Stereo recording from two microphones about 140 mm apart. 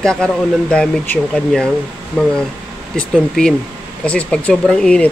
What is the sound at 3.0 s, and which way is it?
Speech, 5° left (ahead or behind).